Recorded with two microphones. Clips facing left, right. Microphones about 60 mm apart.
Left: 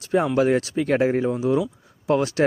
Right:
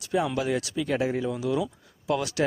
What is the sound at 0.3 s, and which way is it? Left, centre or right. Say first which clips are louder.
Speech: left 8 dB; left.